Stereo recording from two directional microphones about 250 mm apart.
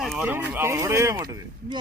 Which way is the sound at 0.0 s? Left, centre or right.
Centre.